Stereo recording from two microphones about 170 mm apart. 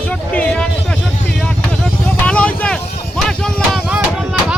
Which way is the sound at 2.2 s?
10° left (ahead or behind).